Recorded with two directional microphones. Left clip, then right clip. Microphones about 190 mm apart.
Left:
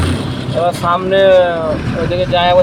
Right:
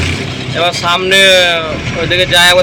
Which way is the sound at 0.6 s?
25° right (ahead or behind).